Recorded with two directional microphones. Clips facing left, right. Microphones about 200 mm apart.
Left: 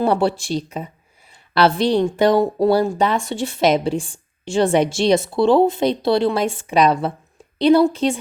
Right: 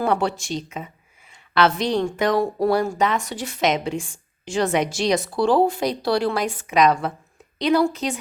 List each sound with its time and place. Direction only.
0.0 s speech: 30° left (ahead or behind)